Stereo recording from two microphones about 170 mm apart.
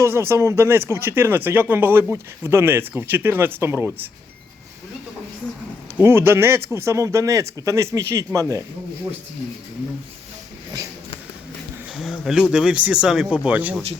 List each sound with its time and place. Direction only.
0.0 s speech: 15° right (ahead or behind)
6.0 s speech: 15° right (ahead or behind)
11.9 s speech: centre (ahead or behind)